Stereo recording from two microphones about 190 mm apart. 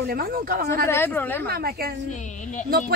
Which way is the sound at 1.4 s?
55° right (ahead or behind).